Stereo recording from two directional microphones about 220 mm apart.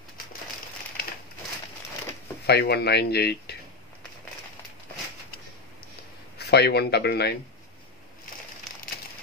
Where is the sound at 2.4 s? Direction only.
45° left (ahead or behind).